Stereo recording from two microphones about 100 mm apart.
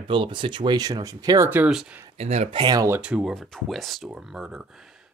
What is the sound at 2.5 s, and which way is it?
Speech, 45° right (ahead or behind).